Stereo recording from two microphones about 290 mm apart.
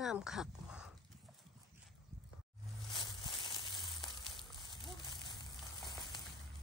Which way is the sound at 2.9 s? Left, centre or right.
Centre.